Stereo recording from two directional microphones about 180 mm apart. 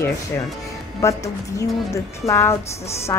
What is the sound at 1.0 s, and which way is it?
Speech, 15° left (ahead or behind).